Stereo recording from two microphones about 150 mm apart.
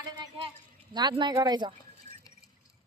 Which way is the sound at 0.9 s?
30° right (ahead or behind).